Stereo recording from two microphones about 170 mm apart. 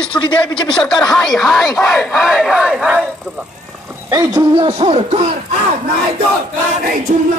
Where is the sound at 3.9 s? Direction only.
15° right (ahead or behind); by 5.3 s 35° right (ahead or behind).